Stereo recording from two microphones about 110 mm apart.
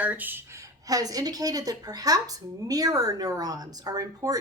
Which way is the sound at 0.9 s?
35° right (ahead or behind).